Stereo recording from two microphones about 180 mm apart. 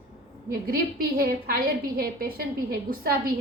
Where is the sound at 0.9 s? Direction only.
55° right (ahead or behind).